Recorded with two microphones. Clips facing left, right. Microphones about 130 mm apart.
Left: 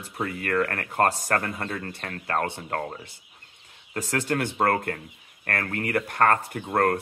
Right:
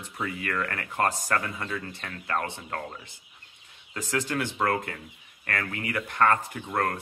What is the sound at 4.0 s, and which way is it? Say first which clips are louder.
Speech: left 3 dB; 45° left (ahead or behind).